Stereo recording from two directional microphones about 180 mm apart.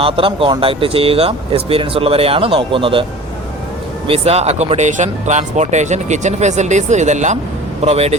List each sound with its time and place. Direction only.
0.0 s speech: 30° right (ahead or behind)